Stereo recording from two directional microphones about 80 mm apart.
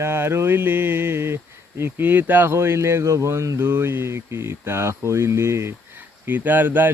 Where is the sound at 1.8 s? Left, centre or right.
Right.